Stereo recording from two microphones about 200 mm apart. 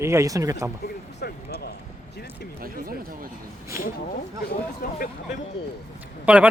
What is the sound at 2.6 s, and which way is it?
Speech, 45° right (ahead or behind).